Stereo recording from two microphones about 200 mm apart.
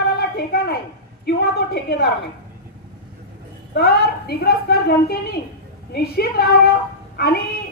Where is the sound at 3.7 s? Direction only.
50° left (ahead or behind).